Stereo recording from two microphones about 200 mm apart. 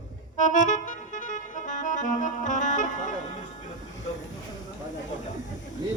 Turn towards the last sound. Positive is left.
turn(degrees=40)  # may be behind; listen again after turning